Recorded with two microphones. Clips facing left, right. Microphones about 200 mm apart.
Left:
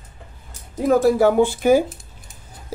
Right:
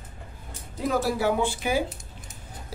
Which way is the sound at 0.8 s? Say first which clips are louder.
Left 9 dB; 50° left (ahead or behind).